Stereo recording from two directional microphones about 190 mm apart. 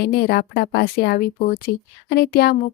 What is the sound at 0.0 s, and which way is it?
Speech, 55° left (ahead or behind).